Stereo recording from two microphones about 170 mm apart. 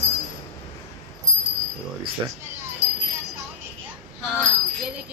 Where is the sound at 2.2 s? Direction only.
20° right (ahead or behind).